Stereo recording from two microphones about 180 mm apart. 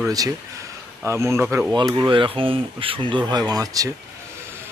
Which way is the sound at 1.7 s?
25° right (ahead or behind).